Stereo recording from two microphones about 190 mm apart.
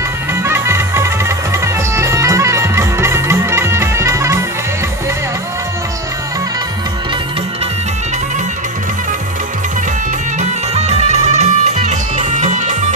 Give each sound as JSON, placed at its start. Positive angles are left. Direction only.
{"t": 0.3, "sound": "music", "side_deg": -15}
{"t": 10.4, "sound": "music", "side_deg": -35}